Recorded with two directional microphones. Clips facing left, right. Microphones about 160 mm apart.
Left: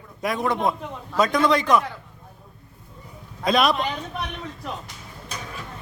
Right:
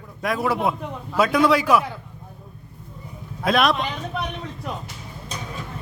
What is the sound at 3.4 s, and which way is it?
Speech, centre (ahead or behind).